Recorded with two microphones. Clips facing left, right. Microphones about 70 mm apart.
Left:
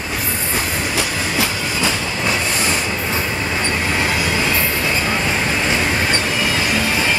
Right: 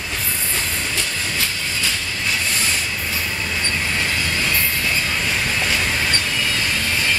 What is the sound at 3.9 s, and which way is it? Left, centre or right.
Train, left.